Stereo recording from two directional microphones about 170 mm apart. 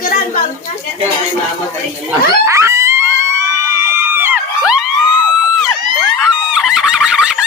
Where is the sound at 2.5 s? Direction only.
20° right (ahead or behind).